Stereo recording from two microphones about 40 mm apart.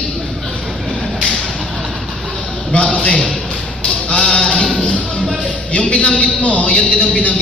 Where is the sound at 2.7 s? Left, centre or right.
Left.